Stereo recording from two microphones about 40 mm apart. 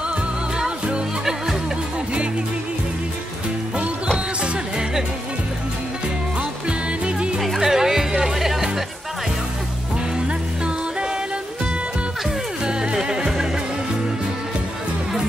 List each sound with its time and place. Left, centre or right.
7.1 s music: right
7.3 s music: centre
12.6 s music: right